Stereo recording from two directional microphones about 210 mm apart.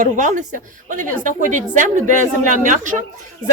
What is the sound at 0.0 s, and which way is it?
A woman's voice, 35° right (ahead or behind).